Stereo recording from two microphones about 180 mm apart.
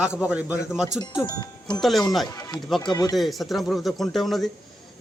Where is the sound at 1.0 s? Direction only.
20° left (ahead or behind).